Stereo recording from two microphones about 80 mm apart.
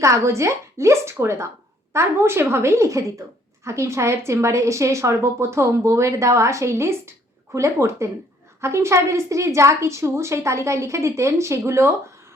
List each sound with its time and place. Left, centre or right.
0.0 s a woman's voice: right